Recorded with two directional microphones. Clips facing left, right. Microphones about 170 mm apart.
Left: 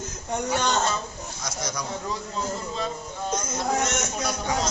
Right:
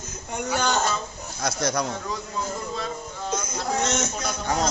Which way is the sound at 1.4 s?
60° right (ahead or behind).